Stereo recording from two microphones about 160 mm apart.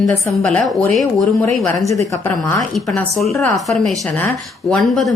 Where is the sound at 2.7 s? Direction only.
Centre (ahead or behind).